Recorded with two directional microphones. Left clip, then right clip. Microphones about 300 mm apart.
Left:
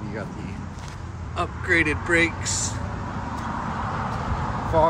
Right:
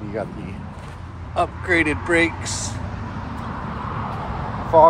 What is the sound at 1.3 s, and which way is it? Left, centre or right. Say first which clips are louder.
Speech: right 3 dB; centre.